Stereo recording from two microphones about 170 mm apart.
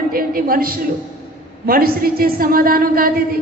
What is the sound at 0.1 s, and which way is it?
A woman's voice, 60° right (ahead or behind).